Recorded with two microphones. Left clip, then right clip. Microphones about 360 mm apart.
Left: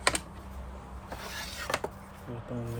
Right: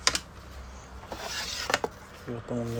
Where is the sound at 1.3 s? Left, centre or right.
Centre.